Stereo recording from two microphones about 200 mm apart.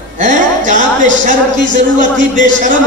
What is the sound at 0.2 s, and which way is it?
A man's voice, 40° right (ahead or behind).